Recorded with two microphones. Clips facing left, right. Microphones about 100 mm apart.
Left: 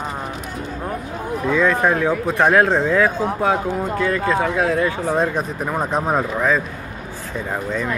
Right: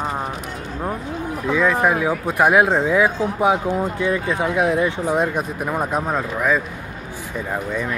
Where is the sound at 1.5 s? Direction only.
10° right (ahead or behind).